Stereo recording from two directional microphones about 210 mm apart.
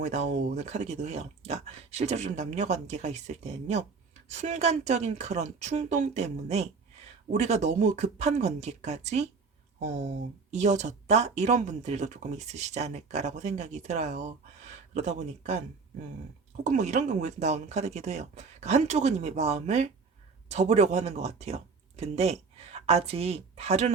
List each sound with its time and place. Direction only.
0.0 s speech: 35° right (ahead or behind)
16.6 s speech: 35° right (ahead or behind)